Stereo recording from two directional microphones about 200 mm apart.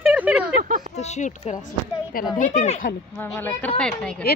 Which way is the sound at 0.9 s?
35° left (ahead or behind).